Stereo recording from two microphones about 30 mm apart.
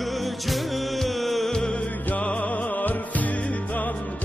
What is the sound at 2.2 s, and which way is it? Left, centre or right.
Music, left.